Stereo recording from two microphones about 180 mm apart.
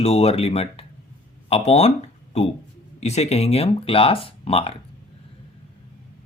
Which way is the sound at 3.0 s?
35° left (ahead or behind).